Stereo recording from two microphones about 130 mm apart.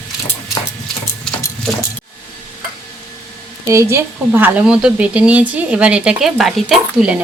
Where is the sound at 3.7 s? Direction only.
20° right (ahead or behind); by 7.2 s 5° right (ahead or behind).